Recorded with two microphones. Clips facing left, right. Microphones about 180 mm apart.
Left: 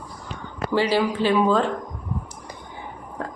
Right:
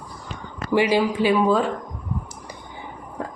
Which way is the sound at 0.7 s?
15° right (ahead or behind).